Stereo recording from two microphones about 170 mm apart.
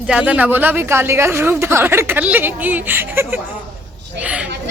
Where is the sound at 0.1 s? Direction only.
5° right (ahead or behind).